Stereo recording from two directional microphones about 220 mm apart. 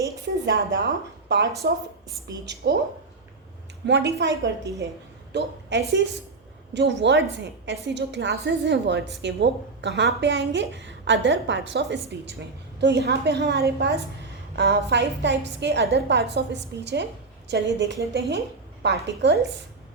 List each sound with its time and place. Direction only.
0.4 s a woman's voice: 50° right (ahead or behind)
3.8 s a woman's voice: 55° right (ahead or behind)